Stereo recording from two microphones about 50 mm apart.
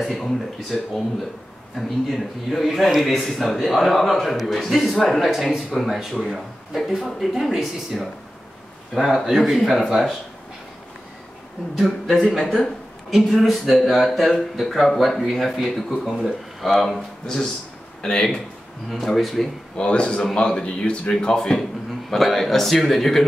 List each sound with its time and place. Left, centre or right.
0.0 s a man's voice: centre
11.8 s a man's voice: centre
12.5 s a sound: centre
13.2 s a man's voice: centre
18.0 s a man's voice: centre
18.9 s a man's voice: centre
19.8 s a man's voice: left; by 23.2 s centre